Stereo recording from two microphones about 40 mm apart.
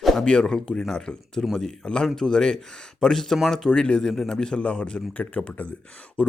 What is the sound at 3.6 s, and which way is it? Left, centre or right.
A man's voice, left.